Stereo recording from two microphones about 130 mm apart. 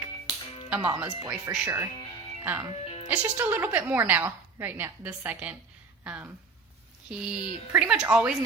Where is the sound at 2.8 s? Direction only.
45° left (ahead or behind).